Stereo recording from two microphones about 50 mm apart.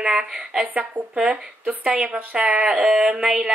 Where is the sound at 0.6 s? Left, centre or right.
Right.